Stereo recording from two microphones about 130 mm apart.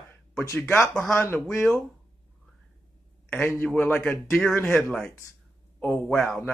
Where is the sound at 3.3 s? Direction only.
15° left (ahead or behind).